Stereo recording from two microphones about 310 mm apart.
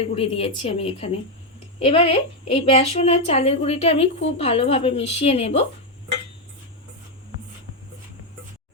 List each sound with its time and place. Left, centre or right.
0.0 s a woman's voice: centre